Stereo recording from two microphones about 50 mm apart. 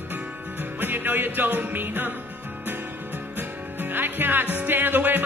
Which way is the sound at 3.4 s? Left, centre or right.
Right.